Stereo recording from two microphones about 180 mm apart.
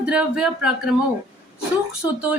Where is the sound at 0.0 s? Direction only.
5° right (ahead or behind).